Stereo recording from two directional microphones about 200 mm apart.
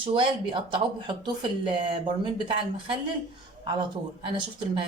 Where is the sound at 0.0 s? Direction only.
25° right (ahead or behind).